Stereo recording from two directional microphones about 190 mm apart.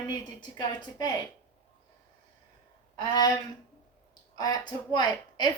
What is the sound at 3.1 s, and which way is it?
Speech, 20° left (ahead or behind).